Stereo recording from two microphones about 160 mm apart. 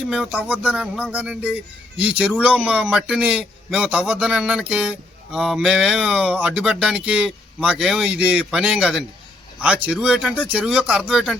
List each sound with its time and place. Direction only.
0.0 s music: 5° right (ahead or behind)